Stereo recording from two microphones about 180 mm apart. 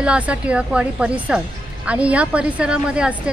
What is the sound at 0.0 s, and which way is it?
A woman's voice, 5° right (ahead or behind).